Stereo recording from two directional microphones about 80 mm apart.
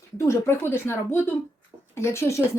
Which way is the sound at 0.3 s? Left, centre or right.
Left.